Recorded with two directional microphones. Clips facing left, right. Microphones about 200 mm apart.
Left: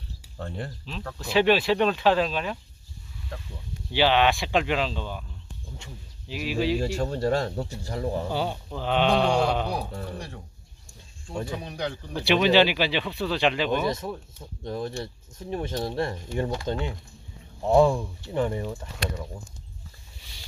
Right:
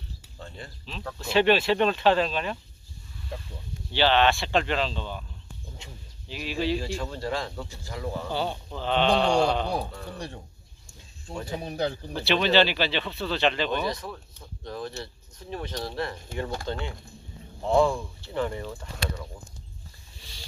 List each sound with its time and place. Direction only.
0.8 s speech: centre (ahead or behind)
3.9 s speech: 10° left (ahead or behind)
6.2 s speech: 5° left (ahead or behind)
6.8 s speech: 45° left (ahead or behind)
8.3 s speech: 10° left (ahead or behind)
11.6 s speech: 35° right (ahead or behind)
12.2 s speech: 15° left (ahead or behind)
13.8 s speech: 25° left (ahead or behind)
16.7 s speech: 50° left (ahead or behind)
17.6 s speech: 15° left (ahead or behind)